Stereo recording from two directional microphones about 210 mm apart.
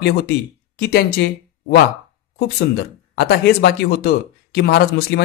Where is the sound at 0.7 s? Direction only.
50° left (ahead or behind).